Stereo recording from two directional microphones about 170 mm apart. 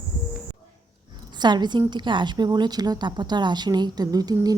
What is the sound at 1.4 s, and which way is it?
A woman's voice, 25° right (ahead or behind).